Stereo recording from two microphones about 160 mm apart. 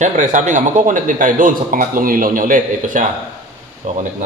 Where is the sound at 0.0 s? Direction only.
50° right (ahead or behind).